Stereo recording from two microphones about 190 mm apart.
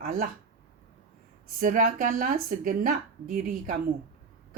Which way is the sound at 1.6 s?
45° right (ahead or behind).